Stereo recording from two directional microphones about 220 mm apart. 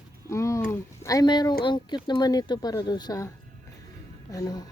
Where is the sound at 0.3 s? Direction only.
15° left (ahead or behind).